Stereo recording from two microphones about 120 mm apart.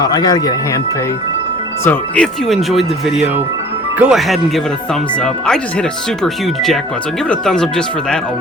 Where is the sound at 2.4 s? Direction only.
Centre (ahead or behind).